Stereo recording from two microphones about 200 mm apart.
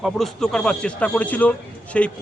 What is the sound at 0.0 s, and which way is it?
A man's voice, centre (ahead or behind).